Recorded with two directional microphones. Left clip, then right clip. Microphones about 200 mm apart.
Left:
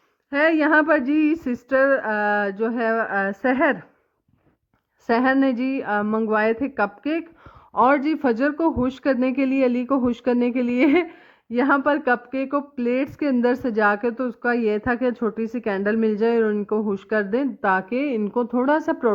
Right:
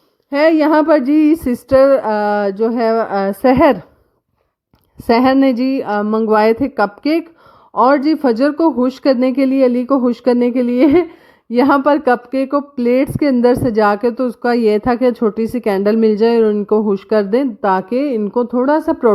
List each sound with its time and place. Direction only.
0.3 s speech: 45° right (ahead or behind)
5.0 s speech: 50° right (ahead or behind)
7.7 s speech: 35° right (ahead or behind)
11.5 s speech: 50° right (ahead or behind); by 19.1 s 35° right (ahead or behind)